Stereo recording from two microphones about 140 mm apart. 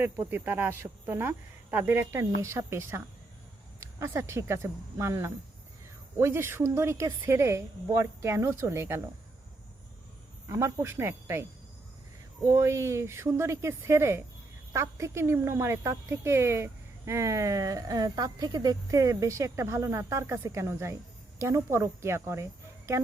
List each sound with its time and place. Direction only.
0.3 s a woman's voice: 15° right (ahead or behind)
10.5 s speech: 20° right (ahead or behind)
12.5 s speech: 20° right (ahead or behind)